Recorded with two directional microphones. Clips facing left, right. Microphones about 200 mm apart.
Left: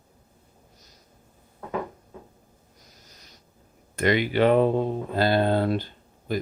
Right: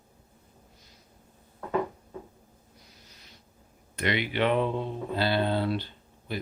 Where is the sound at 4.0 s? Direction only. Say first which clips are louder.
Left 6 dB; 45° left (ahead or behind).